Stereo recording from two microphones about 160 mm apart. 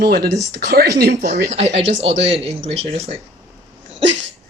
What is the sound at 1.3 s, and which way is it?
Speech, 45° right (ahead or behind).